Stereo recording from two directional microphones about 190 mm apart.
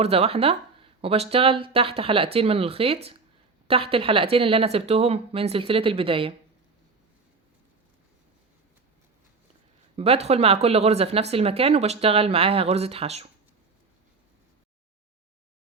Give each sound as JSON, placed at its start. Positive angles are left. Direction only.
{"t": 0.0, "sound": "speech", "side_deg": -30}
{"t": 9.9, "sound": "speech", "side_deg": -30}